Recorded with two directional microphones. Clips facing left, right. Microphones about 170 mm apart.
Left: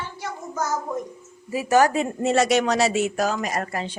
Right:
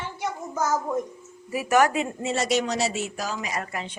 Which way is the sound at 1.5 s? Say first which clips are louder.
Left 2 dB; 30° left (ahead or behind).